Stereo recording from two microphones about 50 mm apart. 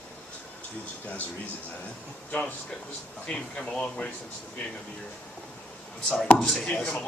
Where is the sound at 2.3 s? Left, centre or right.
Left.